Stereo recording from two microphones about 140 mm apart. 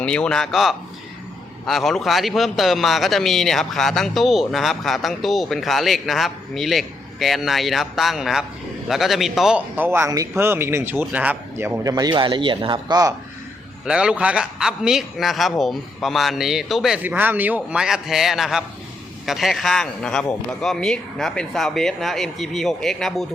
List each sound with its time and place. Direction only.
0.0 s a man's voice: 5° left (ahead or behind); by 13.1 s 25° right (ahead or behind)
13.8 s speech: 5° right (ahead or behind)